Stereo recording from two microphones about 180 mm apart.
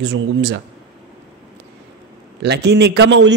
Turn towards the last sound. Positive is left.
turn(degrees=-80)